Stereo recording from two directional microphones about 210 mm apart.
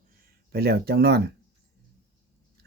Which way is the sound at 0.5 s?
50° right (ahead or behind).